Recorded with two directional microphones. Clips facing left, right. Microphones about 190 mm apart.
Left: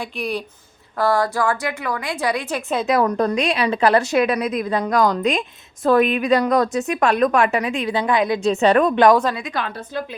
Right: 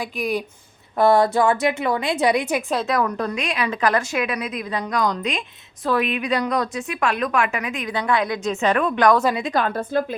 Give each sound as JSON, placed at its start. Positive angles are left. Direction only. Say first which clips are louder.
{"t": 0.0, "sound": "speech", "louder": "right 1 dB", "side_deg": -5}
{"t": 0.9, "sound": "a woman's voice", "louder": "right 3 dB", "side_deg": -20}
{"t": 3.0, "sound": "a woman's voice", "louder": "left 5 dB", "side_deg": 40}
{"t": 9.4, "sound": "speech", "louder": "right 5 dB", "side_deg": -40}